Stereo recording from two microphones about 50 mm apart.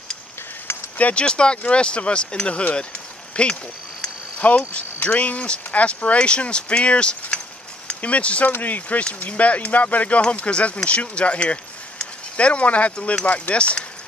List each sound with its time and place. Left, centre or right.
0.9 s speech: left